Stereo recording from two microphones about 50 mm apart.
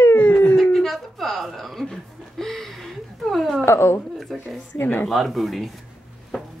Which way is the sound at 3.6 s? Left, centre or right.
Left.